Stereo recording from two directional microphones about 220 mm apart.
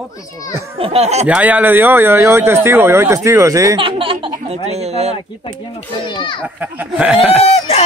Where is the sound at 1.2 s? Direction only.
5° right (ahead or behind); by 5.1 s 30° right (ahead or behind).